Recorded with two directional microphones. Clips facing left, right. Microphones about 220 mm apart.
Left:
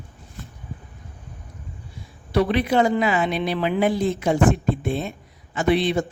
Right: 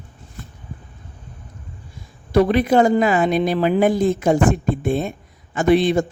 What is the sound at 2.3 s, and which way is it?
A man's voice, 45° right (ahead or behind).